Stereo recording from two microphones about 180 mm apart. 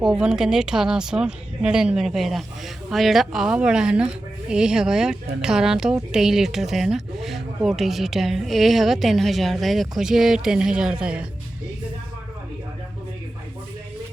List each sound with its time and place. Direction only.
0.0 s a woman's voice: 5° right (ahead or behind)